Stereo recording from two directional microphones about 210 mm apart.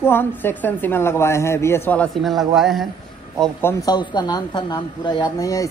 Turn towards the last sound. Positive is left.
turn(degrees=15)  # may be behind; listen again after turning